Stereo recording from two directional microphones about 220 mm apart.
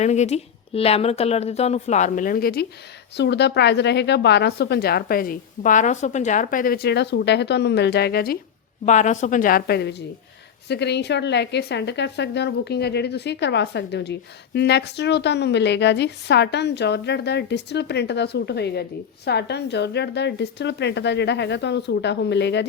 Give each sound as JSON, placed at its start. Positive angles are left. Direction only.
{"t": 0.0, "sound": "a woman's voice", "side_deg": 30}
{"t": 8.8, "sound": "a woman's voice", "side_deg": 30}